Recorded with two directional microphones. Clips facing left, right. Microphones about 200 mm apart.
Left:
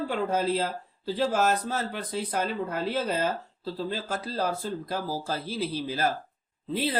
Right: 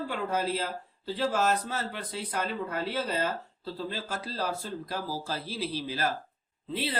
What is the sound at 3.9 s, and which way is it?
Speech, 45° left (ahead or behind).